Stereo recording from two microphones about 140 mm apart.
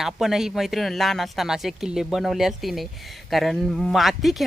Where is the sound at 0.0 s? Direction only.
Centre (ahead or behind).